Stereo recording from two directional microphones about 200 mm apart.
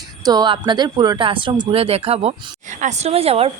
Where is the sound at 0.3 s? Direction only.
20° right (ahead or behind).